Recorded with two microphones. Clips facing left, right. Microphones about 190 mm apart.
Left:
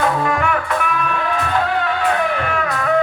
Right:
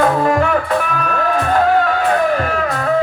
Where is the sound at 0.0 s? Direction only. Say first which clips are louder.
Right 4 dB; 40° right (ahead or behind).